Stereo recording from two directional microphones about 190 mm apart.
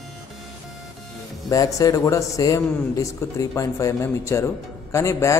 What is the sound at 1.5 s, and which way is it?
A man's voice, 20° left (ahead or behind).